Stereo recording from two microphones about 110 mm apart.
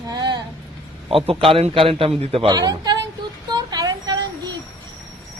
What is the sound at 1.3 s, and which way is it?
A man's voice, 60° right (ahead or behind).